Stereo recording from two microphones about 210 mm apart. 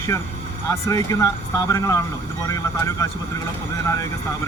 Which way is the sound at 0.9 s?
15° left (ahead or behind).